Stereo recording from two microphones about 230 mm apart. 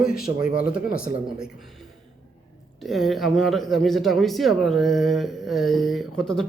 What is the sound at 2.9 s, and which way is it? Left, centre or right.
Speech, centre.